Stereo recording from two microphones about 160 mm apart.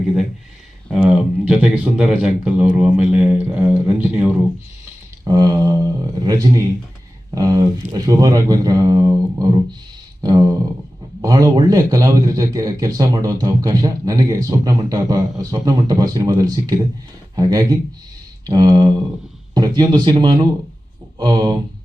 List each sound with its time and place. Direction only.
0.9 s speech: 5° right (ahead or behind)
5.2 s a man's voice: 25° right (ahead or behind)
10.2 s a sound: 25° right (ahead or behind)
11.2 s a man's voice: 20° right (ahead or behind)